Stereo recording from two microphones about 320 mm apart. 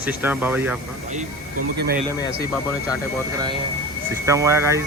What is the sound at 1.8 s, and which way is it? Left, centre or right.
Speech, right.